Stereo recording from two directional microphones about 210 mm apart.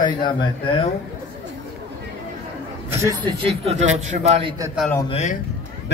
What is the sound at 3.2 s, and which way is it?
A man's voice, 25° right (ahead or behind).